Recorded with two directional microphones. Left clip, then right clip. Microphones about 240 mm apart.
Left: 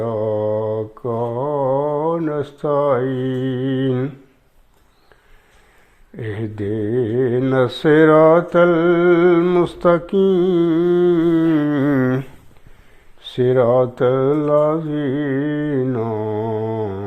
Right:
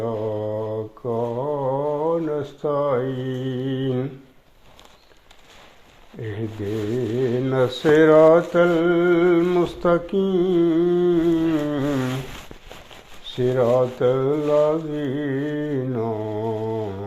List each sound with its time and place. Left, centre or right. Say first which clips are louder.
0.0 s mantra: left 5 dB; left
6.1 s a sound: left 4 dB; left
7.2 s mantra: left 3 dB; left
13.2 s mantra: left 5 dB; left